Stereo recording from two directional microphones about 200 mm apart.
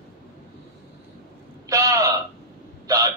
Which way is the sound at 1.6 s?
15° right (ahead or behind).